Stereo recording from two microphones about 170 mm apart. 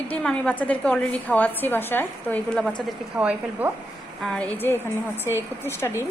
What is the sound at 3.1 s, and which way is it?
Speech, 10° right (ahead or behind).